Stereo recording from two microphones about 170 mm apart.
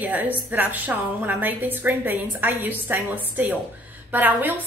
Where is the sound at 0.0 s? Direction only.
10° right (ahead or behind).